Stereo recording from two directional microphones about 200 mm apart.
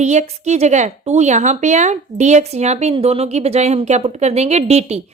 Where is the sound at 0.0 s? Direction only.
35° right (ahead or behind).